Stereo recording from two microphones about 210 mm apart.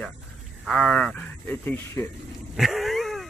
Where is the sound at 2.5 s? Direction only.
Centre (ahead or behind).